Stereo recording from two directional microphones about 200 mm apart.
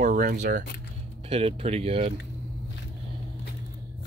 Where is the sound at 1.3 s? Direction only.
30° right (ahead or behind).